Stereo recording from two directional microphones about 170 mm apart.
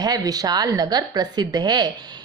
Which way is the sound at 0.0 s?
20° right (ahead or behind).